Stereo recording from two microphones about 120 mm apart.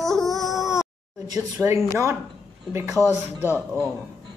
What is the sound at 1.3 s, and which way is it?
Speech, 25° right (ahead or behind).